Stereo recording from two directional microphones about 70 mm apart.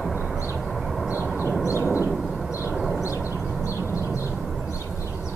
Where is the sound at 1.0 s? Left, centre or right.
Centre.